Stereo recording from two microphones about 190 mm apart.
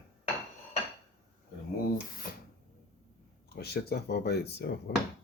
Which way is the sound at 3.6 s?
55° left (ahead or behind).